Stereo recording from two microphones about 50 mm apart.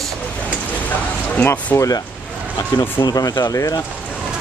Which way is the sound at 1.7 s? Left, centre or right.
Left.